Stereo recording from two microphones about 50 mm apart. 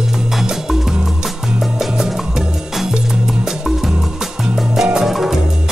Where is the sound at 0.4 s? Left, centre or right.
Centre.